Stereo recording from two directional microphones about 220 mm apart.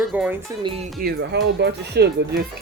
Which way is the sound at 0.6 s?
25° right (ahead or behind).